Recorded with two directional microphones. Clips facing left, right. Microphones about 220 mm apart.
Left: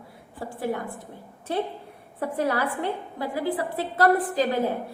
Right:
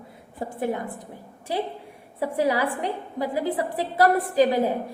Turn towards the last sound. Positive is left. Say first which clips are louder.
# right 3 dB
turn(degrees=-15)  # may be behind; listen again after turning